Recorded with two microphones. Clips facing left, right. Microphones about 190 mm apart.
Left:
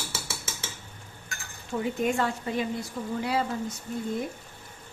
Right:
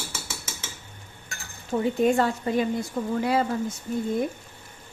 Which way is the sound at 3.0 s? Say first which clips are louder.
Right 6 dB; 70° right (ahead or behind).